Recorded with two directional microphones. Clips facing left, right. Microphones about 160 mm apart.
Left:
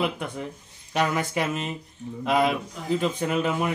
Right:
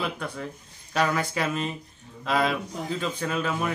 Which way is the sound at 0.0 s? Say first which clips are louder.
Left 3 dB; 20° left (ahead or behind).